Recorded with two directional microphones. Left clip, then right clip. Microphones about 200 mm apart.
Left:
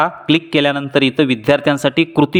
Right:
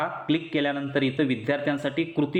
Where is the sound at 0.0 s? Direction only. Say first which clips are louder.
Left 11 dB; 35° left (ahead or behind).